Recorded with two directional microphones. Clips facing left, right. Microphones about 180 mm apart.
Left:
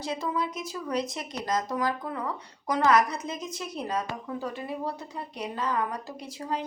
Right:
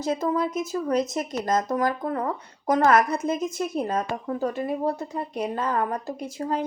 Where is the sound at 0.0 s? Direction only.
45° right (ahead or behind).